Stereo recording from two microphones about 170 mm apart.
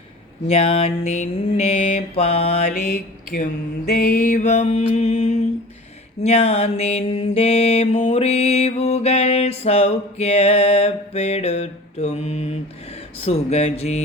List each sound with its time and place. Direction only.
0.4 s mantra: 35° left (ahead or behind)
2.7 s mantra: 65° left (ahead or behind)
3.9 s mantra: 55° left (ahead or behind)